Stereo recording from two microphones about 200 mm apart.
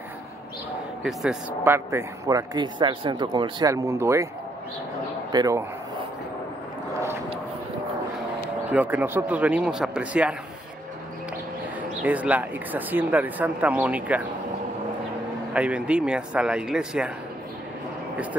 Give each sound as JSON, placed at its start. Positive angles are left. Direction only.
{"t": 1.0, "sound": "speech", "side_deg": -5}
{"t": 5.3, "sound": "speech", "side_deg": -20}
{"t": 8.6, "sound": "speech", "side_deg": -5}
{"t": 12.0, "sound": "speech", "side_deg": -5}
{"t": 15.5, "sound": "speech", "side_deg": -5}